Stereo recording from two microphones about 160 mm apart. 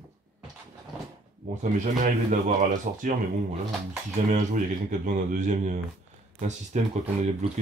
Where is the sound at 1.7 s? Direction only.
50° right (ahead or behind).